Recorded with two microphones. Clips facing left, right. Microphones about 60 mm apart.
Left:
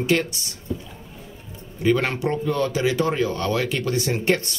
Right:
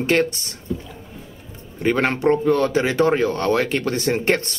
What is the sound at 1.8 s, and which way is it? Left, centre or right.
Speech, right.